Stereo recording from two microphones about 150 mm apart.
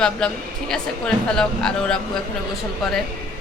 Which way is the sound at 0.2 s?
5° left (ahead or behind).